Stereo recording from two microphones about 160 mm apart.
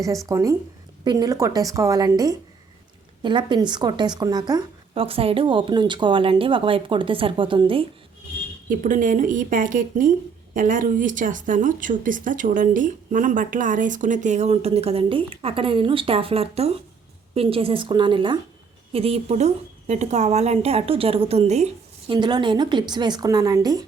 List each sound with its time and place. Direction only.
0.3 s a woman's voice: 20° right (ahead or behind)
8.7 s a woman's voice: 55° right (ahead or behind); by 23.8 s 25° right (ahead or behind)